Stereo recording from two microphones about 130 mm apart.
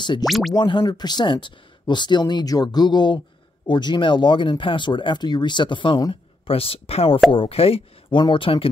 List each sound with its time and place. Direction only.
0.0 s speech: 35° left (ahead or behind)
0.3 s music: centre (ahead or behind)
0.6 s speech: 35° left (ahead or behind)
6.4 s speech: 45° left (ahead or behind)